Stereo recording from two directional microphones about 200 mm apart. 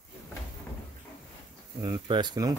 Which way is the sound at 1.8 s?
20° right (ahead or behind).